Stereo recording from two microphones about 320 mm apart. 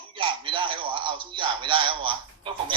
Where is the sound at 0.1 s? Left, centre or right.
Centre.